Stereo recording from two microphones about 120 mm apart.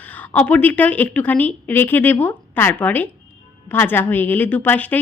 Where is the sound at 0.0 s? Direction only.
15° left (ahead or behind).